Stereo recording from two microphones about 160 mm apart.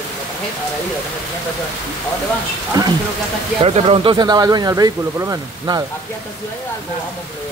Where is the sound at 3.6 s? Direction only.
35° right (ahead or behind).